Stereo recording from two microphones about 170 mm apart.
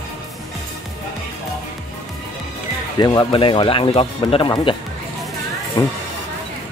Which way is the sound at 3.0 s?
25° left (ahead or behind).